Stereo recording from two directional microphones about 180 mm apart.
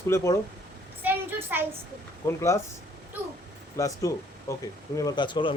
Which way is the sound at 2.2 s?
15° left (ahead or behind).